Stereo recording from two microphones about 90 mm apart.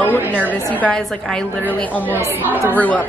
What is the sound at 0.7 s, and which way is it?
Speech, 15° left (ahead or behind).